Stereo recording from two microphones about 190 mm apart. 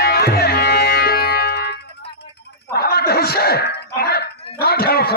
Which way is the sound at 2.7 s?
55° left (ahead or behind).